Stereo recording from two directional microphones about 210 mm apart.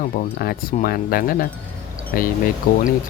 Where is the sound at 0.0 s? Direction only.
40° left (ahead or behind).